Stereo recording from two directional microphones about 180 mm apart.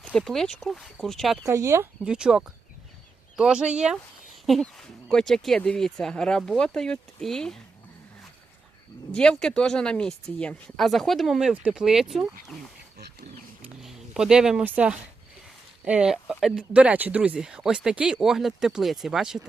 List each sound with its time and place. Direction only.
0.0 s speech: 5° left (ahead or behind)
1.5 s speech: 15° right (ahead or behind)
2.0 s speech: 5° right (ahead or behind)
9.1 s speech: 5° left (ahead or behind)
13.6 s a sound: 5° right (ahead or behind)
15.8 s speech: 5° right (ahead or behind)